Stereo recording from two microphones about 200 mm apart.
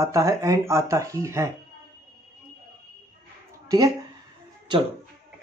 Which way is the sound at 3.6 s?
20° right (ahead or behind).